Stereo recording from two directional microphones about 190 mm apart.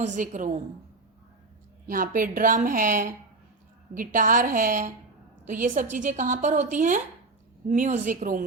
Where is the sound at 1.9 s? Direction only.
50° right (ahead or behind).